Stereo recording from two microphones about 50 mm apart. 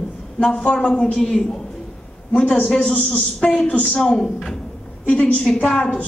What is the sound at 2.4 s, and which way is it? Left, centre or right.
Speech, left.